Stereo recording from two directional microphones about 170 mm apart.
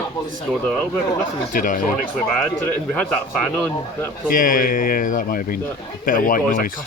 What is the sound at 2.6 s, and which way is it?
Speech, 10° left (ahead or behind).